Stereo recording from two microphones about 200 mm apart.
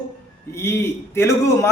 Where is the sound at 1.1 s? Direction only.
15° left (ahead or behind).